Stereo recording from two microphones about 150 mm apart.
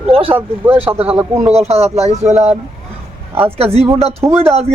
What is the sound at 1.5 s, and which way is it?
A man's voice, 45° right (ahead or behind).